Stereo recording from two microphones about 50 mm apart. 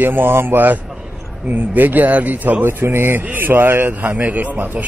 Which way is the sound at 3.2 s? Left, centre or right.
Right.